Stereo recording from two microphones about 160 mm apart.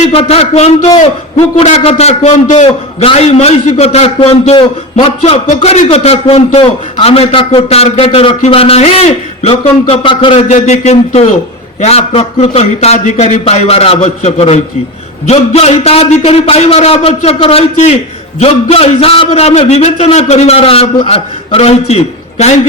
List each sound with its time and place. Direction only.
0.1 s a man's voice: 40° left (ahead or behind)
10.5 s a man's voice: 45° left (ahead or behind)